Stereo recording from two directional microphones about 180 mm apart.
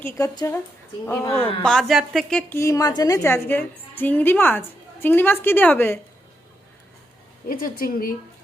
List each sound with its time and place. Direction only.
0.2 s a woman's voice: 15° left (ahead or behind)
1.6 s a woman's voice: centre (ahead or behind)
2.5 s a woman's voice: 15° left (ahead or behind)
7.4 s a woman's voice: 55° left (ahead or behind)